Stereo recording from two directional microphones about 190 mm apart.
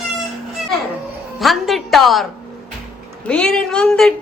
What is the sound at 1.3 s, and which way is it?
A woman's voice, centre (ahead or behind).